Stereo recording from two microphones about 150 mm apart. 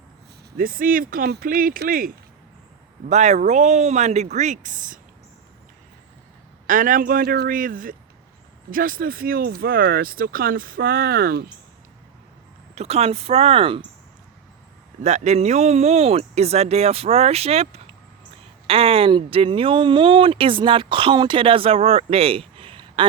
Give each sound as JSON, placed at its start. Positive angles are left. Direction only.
{"t": 0.5, "sound": "speech", "side_deg": -70}
{"t": 3.1, "sound": "speech", "side_deg": -50}
{"t": 6.7, "sound": "speech", "side_deg": -65}
{"t": 12.7, "sound": "speech", "side_deg": -45}
{"t": 15.0, "sound": "speech", "side_deg": -50}